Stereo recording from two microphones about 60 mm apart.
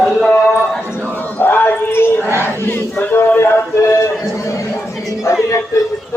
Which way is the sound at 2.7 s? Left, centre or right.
Left.